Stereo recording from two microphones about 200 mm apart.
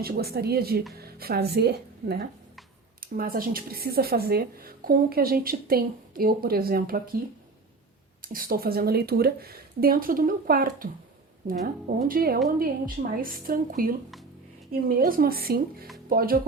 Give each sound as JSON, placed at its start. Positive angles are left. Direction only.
{"t": 0.0, "sound": "speech", "side_deg": -50}
{"t": 8.2, "sound": "speech", "side_deg": -45}